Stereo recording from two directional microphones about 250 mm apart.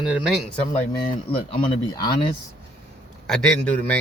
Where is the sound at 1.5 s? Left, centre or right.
Centre.